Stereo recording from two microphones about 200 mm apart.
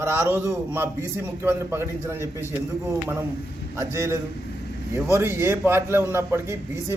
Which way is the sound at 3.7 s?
15° right (ahead or behind).